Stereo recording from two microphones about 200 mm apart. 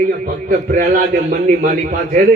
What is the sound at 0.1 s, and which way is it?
A man's voice, 40° right (ahead or behind).